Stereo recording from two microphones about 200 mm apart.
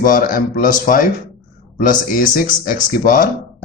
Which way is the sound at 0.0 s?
45° left (ahead or behind).